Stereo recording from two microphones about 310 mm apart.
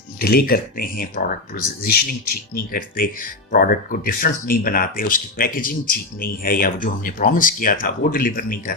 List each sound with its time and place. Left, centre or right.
0.2 s speech: left